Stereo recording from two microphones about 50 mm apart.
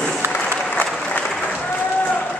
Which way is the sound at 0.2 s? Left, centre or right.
Right.